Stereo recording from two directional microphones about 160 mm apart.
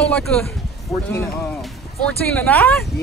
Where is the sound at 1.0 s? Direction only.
15° left (ahead or behind).